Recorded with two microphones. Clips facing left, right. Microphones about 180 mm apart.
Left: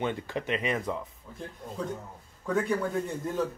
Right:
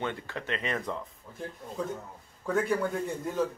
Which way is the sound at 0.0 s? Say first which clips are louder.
Left 3 dB; 15° left (ahead or behind).